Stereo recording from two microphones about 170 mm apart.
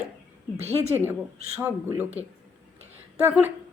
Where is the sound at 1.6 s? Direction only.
10° right (ahead or behind).